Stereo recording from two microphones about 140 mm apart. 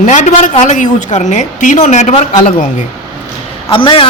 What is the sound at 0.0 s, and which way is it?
A woman's voice, 60° left (ahead or behind).